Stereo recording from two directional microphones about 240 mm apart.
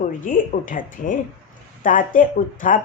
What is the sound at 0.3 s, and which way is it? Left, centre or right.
Speech, left.